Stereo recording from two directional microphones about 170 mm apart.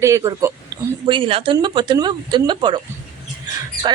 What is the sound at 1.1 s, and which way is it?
A woman's voice, 30° right (ahead or behind).